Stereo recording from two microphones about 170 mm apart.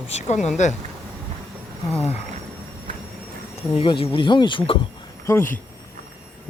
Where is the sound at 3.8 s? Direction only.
30° left (ahead or behind).